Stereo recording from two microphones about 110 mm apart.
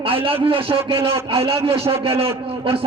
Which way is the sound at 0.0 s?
55° right (ahead or behind).